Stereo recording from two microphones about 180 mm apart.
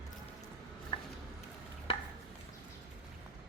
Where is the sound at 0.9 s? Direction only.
25° left (ahead or behind).